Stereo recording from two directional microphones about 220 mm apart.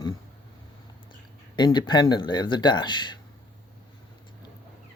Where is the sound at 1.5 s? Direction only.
20° left (ahead or behind).